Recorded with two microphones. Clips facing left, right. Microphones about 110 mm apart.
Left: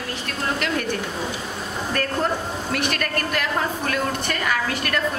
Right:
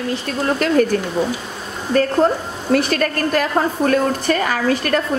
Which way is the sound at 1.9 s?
35° right (ahead or behind).